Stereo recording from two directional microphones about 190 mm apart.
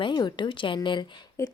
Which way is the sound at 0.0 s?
25° left (ahead or behind).